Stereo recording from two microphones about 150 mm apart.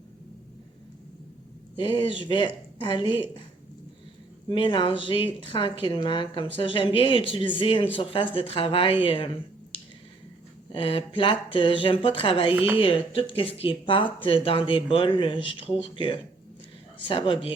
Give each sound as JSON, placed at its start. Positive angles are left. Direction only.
{"t": 1.7, "sound": "speech", "side_deg": 35}
{"t": 4.4, "sound": "speech", "side_deg": 35}
{"t": 10.7, "sound": "speech", "side_deg": 35}